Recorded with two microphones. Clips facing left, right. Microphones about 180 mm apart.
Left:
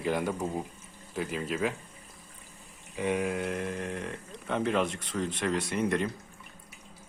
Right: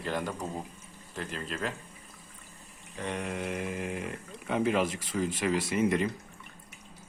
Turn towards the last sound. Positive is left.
turn(degrees=0)  # may be behind; listen again after turning